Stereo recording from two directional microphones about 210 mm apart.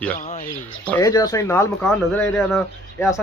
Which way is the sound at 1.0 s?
15° left (ahead or behind).